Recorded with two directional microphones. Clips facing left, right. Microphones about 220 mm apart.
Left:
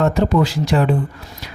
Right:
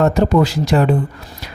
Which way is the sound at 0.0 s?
40° right (ahead or behind).